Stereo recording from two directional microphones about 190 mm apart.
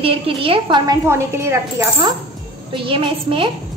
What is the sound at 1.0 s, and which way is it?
Speech, 15° right (ahead or behind).